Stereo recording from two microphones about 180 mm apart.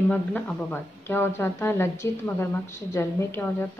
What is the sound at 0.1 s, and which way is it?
A woman's voice, 10° left (ahead or behind).